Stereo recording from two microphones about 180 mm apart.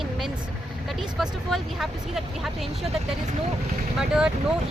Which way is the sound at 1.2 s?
Centre (ahead or behind).